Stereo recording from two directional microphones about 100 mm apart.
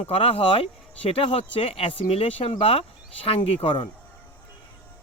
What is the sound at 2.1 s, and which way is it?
Speech, 80° left.